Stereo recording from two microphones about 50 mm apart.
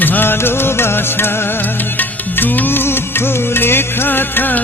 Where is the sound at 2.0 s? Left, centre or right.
Left.